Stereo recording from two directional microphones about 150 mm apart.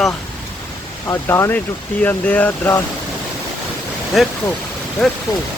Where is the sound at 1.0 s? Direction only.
15° left (ahead or behind).